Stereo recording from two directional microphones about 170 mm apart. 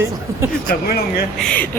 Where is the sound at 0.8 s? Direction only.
65° left (ahead or behind).